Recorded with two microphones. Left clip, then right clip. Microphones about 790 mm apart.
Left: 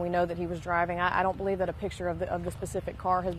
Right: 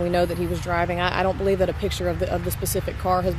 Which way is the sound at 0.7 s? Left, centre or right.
Left.